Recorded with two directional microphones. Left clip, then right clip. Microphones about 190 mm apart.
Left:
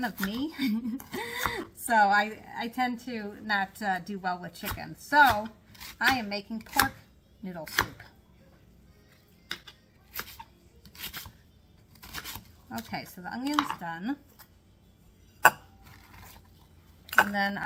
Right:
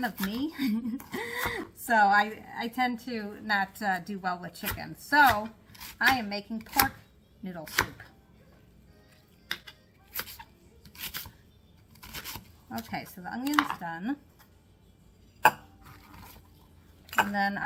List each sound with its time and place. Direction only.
0.0 s speech: 5° left (ahead or behind)
10.1 s music: centre (ahead or behind)
10.8 s a sound: centre (ahead or behind)
13.4 s speech: 20° right (ahead or behind)
13.7 s speech: centre (ahead or behind)
15.8 s dishes: centre (ahead or behind)
17.1 s speech: 5° left (ahead or behind)